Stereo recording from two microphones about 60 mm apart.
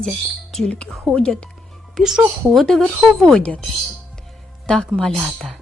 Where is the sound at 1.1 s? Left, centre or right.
Centre.